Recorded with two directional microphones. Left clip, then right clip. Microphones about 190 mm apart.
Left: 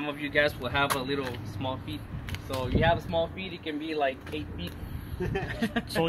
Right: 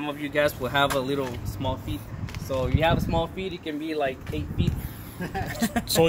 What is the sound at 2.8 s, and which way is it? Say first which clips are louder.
Speech: even; 55° right (ahead or behind).